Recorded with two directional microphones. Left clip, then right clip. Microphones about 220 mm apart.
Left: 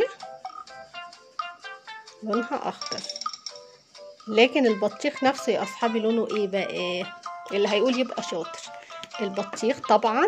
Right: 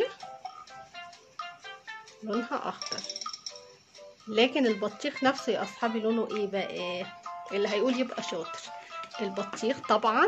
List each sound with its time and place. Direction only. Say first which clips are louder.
0.9 s music: left 8 dB; 35° left (ahead or behind)
2.4 s speech: left 4 dB; 20° left (ahead or behind)
3.0 s music: left 5 dB; 35° left (ahead or behind)
4.3 s speech: left 6 dB; 20° left (ahead or behind)